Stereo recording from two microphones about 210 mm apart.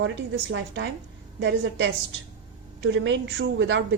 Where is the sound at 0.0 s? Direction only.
60° right (ahead or behind).